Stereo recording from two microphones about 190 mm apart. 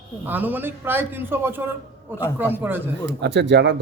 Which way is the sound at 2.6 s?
10° right (ahead or behind).